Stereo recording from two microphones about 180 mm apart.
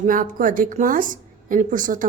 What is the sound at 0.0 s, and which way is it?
A woman's voice, 50° right (ahead or behind).